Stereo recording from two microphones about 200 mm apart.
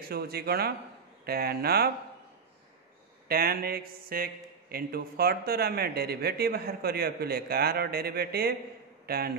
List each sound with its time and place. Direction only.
0.1 s speech: 50° right (ahead or behind)
3.3 s a man's voice: 50° right (ahead or behind)